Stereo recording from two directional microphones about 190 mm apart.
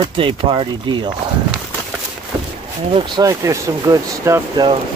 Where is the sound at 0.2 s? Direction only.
25° right (ahead or behind).